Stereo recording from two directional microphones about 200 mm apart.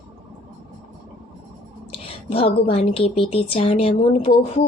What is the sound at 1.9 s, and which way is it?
A child's voice, 30° left (ahead or behind).